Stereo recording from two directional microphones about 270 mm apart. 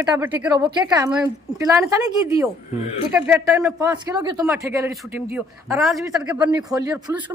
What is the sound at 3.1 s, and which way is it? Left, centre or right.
Speech, centre.